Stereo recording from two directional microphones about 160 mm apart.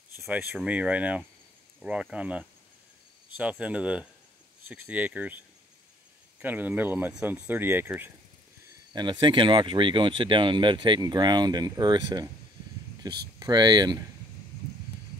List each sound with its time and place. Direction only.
0.1 s a sound: 15° right (ahead or behind)
0.4 s speech: 5° right (ahead or behind)
6.4 s speech: 10° right (ahead or behind)
8.9 s speech: 30° right (ahead or behind)